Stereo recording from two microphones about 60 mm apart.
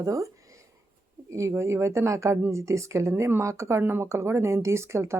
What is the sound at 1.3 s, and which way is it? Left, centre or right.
Speech, right.